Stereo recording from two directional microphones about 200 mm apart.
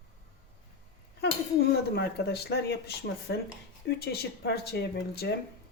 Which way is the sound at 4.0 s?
50° left (ahead or behind).